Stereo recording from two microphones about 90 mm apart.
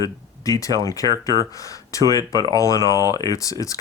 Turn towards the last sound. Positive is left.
turn(degrees=40)  # may be behind; listen again after turning